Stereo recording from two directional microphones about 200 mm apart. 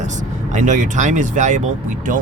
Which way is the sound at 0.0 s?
40° right (ahead or behind).